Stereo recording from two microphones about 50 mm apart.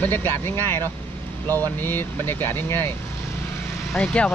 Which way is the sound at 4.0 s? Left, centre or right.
Centre.